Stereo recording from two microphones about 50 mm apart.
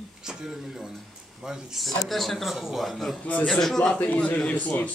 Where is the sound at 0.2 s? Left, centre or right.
Centre.